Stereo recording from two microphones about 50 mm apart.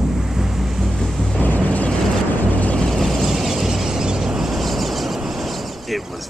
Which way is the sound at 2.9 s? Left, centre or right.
Centre.